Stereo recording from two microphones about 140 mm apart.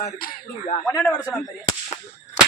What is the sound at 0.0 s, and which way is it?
Speech, 90° left.